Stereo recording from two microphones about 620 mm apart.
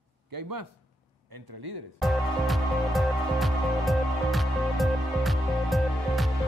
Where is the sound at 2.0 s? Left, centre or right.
Centre.